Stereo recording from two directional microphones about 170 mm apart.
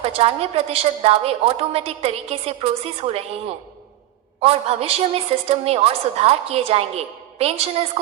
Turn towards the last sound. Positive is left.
turn(degrees=-35)  # may be behind; listen again after turning